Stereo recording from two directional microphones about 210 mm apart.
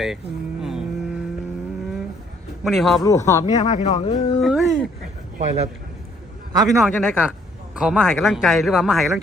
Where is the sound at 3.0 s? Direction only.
15° left (ahead or behind).